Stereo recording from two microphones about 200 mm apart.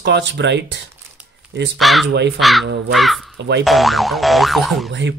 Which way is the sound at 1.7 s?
Centre (ahead or behind).